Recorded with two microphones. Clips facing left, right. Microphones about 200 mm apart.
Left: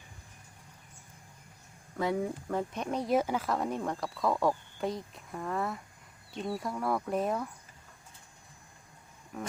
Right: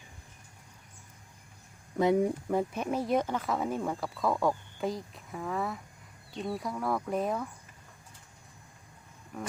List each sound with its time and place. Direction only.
2.0 s speech: 20° right (ahead or behind); by 7.5 s centre (ahead or behind)
9.3 s speech: centre (ahead or behind)